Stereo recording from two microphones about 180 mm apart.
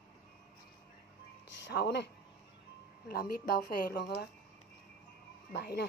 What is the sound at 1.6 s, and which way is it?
Speech, 75° left (ahead or behind).